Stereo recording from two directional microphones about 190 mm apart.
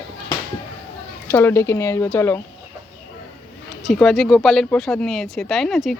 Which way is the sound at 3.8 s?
5° left (ahead or behind).